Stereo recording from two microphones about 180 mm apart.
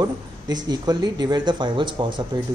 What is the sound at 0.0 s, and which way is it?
Speech, 20° right (ahead or behind).